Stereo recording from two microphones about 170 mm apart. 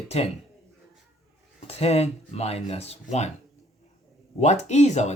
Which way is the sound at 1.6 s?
40° left (ahead or behind).